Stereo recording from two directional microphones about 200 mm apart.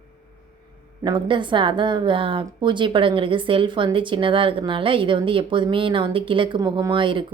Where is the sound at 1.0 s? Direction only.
25° right (ahead or behind).